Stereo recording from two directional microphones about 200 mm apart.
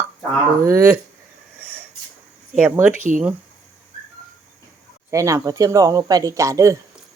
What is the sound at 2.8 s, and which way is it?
Speech, 40° right (ahead or behind).